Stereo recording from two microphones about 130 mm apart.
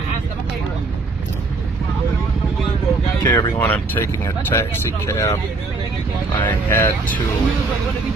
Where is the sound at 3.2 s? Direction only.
30° left (ahead or behind).